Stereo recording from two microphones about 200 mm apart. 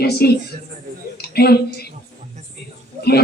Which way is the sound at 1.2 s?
50° left (ahead or behind).